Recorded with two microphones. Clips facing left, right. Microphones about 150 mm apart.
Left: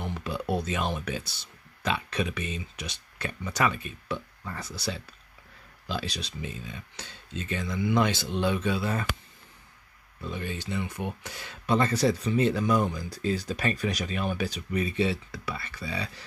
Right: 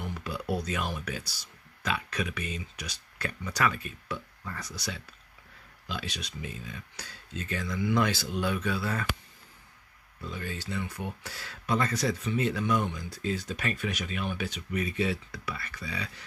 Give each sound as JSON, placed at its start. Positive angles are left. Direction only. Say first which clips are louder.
{"t": 0.0, "sound": "speech", "louder": "left 3 dB", "side_deg": 25}
{"t": 10.2, "sound": "speech", "louder": "left 3 dB", "side_deg": 20}